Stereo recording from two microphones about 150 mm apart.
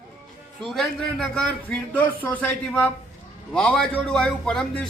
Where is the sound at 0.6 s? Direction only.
Centre (ahead or behind).